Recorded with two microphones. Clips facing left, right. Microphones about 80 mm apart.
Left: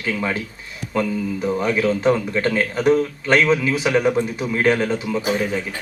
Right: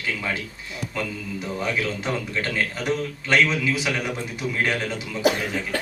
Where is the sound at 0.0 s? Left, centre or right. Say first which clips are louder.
Left 5 dB; left.